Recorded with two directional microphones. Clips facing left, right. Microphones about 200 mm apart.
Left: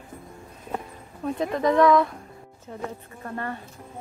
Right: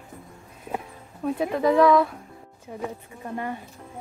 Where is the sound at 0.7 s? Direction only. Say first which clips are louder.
Even; 5° right (ahead or behind).